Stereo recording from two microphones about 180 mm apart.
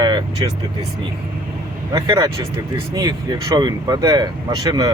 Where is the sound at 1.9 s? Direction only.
20° right (ahead or behind).